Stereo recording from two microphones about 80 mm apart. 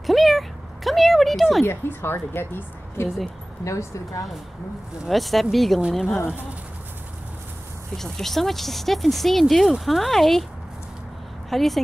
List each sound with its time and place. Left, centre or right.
0.0 s a sound: centre
1.6 s speech: left
3.6 s speech: left
5.0 s speech: centre
8.0 s speech: centre
11.5 s speech: centre